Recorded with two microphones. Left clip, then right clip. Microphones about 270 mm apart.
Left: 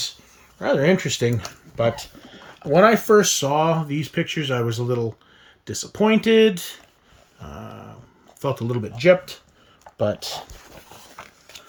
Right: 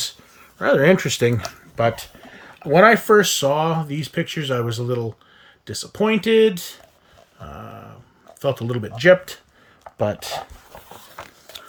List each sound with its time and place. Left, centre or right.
0.6 s speech: centre
8.4 s speech: centre